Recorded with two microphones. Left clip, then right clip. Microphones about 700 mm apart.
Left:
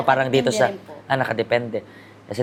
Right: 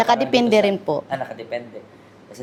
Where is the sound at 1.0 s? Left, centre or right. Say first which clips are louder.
Left 7 dB; left.